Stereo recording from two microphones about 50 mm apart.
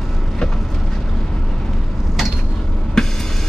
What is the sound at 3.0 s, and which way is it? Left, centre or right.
Music, centre.